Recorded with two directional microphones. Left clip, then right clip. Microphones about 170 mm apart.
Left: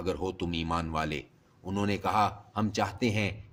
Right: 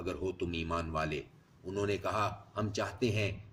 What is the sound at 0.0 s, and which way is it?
A man's voice, 50° left (ahead or behind).